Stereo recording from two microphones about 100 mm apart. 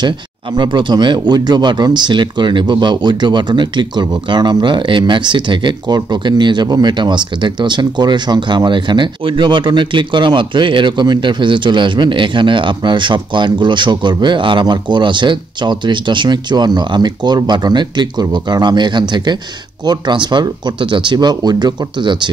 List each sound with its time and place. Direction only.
0.6 s speech: 50° right (ahead or behind)